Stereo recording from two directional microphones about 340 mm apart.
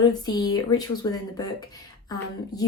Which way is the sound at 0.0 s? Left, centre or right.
Centre.